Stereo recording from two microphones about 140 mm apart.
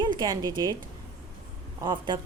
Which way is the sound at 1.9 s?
30° right (ahead or behind).